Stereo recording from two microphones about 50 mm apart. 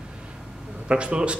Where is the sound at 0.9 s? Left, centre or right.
Right.